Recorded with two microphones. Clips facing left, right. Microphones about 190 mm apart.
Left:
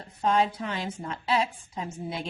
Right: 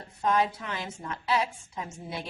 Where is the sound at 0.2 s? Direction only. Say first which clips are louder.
Left 2 dB; 25° left (ahead or behind).